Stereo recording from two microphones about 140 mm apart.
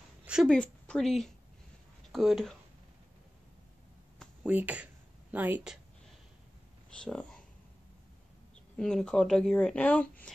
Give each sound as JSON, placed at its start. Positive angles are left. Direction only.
{"t": 0.2, "sound": "a sound", "side_deg": -5}
{"t": 0.5, "sound": "a woman's voice", "side_deg": 5}
{"t": 4.4, "sound": "a woman's voice", "side_deg": -10}
{"t": 7.0, "sound": "speech", "side_deg": 5}
{"t": 8.7, "sound": "speech", "side_deg": 5}